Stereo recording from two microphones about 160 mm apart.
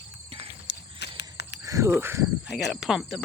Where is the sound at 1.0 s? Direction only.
90° left.